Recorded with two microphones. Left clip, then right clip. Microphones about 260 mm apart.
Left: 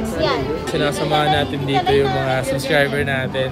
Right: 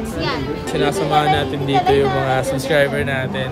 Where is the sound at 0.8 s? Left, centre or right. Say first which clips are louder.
Right 2 dB; centre.